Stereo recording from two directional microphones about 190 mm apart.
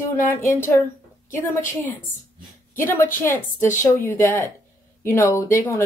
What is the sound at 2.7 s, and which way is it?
A woman's voice, 10° left (ahead or behind).